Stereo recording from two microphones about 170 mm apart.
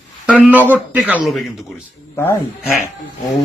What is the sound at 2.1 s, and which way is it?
Speech, 15° left (ahead or behind).